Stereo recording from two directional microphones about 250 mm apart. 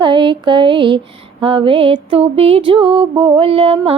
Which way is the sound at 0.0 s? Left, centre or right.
Centre.